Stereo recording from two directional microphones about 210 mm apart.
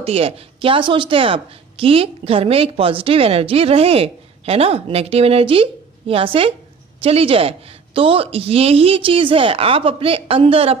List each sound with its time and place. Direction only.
0.0 s a woman's voice: 25° right (ahead or behind)